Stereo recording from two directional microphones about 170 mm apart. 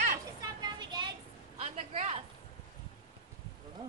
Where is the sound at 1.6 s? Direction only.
40° right (ahead or behind).